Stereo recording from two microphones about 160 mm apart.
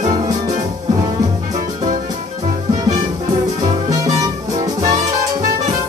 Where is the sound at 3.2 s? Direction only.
25° right (ahead or behind).